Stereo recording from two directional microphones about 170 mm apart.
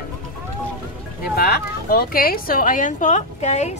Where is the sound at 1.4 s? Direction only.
65° left (ahead or behind); by 3.8 s 40° left (ahead or behind).